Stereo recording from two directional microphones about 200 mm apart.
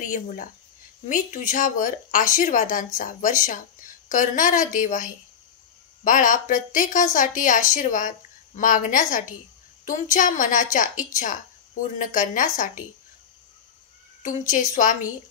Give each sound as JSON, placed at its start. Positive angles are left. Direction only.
{"t": 0.0, "sound": "speech", "side_deg": 40}
{"t": 14.5, "sound": "speech", "side_deg": 40}